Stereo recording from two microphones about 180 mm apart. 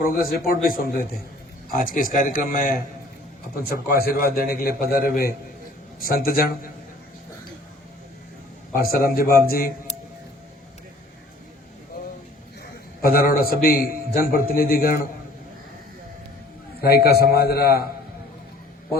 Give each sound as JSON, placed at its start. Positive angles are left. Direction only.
{"t": 0.0, "sound": "a man's voice", "side_deg": 55}
{"t": 1.7, "sound": "a man's voice", "side_deg": 50}
{"t": 8.7, "sound": "a man's voice", "side_deg": 55}
{"t": 13.0, "sound": "a man's voice", "side_deg": 55}
{"t": 16.8, "sound": "a man's voice", "side_deg": 60}